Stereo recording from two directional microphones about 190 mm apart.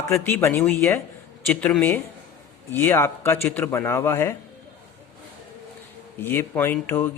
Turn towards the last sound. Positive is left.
turn(degrees=10)  # may be behind; listen again after turning